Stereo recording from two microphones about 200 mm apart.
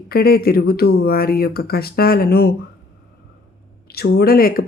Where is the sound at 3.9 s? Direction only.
55° left (ahead or behind).